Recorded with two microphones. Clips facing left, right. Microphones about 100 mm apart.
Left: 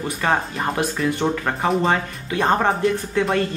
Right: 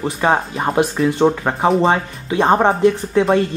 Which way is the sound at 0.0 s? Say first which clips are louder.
Right 4 dB; 25° right (ahead or behind).